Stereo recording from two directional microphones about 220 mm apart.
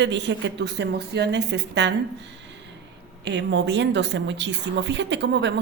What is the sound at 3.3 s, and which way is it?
A woman's voice, 50° right (ahead or behind).